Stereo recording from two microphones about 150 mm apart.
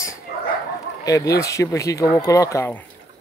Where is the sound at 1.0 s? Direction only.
20° left (ahead or behind).